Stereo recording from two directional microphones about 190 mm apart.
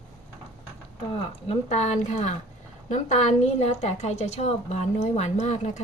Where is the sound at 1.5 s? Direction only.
35° left (ahead or behind).